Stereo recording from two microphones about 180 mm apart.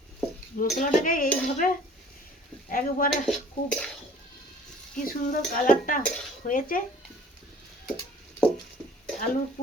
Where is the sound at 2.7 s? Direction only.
50° left (ahead or behind).